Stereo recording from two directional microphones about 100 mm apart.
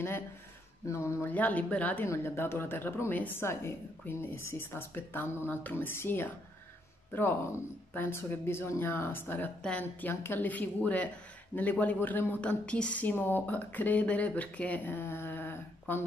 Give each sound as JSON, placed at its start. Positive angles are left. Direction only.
{"t": 0.8, "sound": "a woman's voice", "side_deg": 25}
{"t": 1.3, "sound": "a woman's voice", "side_deg": 15}